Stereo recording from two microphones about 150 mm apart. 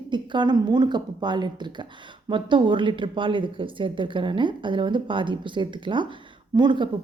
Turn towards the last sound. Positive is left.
turn(degrees=-30)  # may be behind; listen again after turning